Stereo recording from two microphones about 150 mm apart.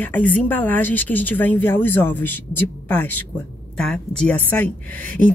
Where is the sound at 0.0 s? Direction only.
10° left (ahead or behind).